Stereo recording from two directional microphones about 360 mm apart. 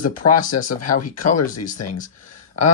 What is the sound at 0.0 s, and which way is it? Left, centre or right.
Speech, left.